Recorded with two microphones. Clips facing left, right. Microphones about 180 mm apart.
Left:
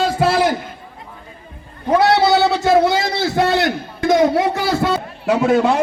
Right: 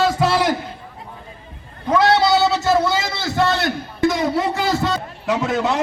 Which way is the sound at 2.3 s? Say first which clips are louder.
Left 2 dB; 55° left (ahead or behind).